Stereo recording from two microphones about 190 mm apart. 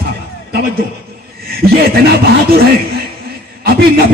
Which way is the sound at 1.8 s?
55° right (ahead or behind).